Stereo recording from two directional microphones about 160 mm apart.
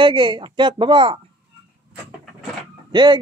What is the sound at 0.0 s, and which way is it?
Speech, 30° right (ahead or behind).